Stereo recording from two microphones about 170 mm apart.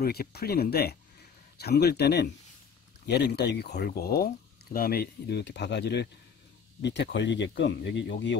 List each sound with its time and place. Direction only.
0.0 s speech: 65° left (ahead or behind); by 8.4 s 90° left